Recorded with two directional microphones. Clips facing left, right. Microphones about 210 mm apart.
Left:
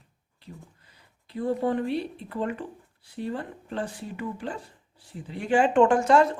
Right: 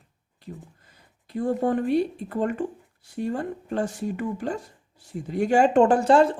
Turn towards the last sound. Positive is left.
turn(degrees=-30)  # may be behind; listen again after turning